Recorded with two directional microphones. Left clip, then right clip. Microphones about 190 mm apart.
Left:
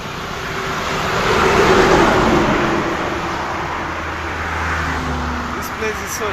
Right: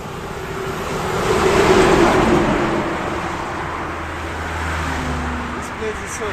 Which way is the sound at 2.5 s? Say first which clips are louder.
Left 2 dB; 40° left (ahead or behind).